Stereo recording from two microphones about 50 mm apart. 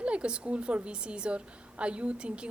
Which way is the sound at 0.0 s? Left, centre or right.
Right.